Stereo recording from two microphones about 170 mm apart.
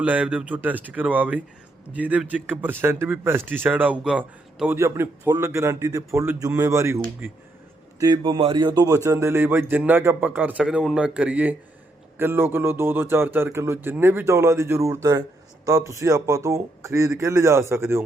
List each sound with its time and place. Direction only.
0.0 s speech: 10° right (ahead or behind)